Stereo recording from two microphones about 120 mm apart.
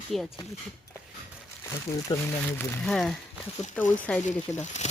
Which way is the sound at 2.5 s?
5° left (ahead or behind).